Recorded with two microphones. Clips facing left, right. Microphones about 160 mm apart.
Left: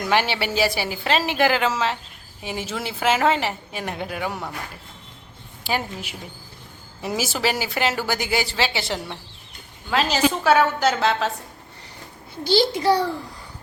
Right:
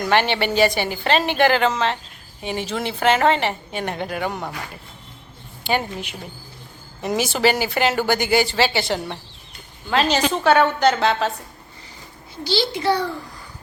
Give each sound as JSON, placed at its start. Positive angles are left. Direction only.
{"t": 0.1, "sound": "a woman's voice", "side_deg": 5}
{"t": 5.6, "sound": "a woman's voice", "side_deg": 5}
{"t": 12.5, "sound": "a child's voice", "side_deg": 45}